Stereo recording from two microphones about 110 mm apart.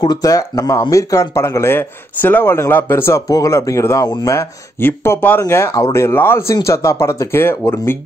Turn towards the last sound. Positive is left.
turn(degrees=20)  # may be behind; listen again after turning